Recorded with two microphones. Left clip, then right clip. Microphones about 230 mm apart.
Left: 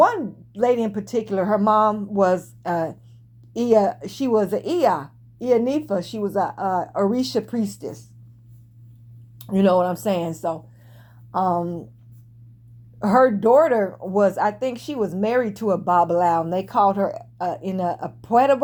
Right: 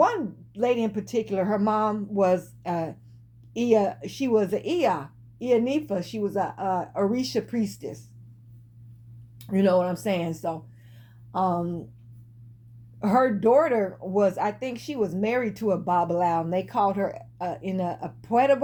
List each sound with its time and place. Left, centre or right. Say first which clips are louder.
0.0 s speech: left 5 dB; left
9.4 s speech: left 4 dB; left
13.0 s speech: left 5 dB; left